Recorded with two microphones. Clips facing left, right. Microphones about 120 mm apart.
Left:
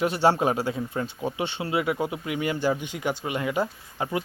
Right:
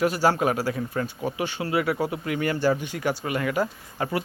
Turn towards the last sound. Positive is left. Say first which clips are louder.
# right 1 dB
turn(degrees=20)  # may be behind; listen again after turning